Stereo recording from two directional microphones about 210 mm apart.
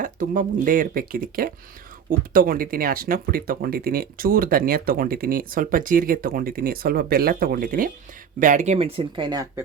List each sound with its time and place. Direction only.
0.0 s speech: 40° right (ahead or behind); by 9.6 s 15° right (ahead or behind)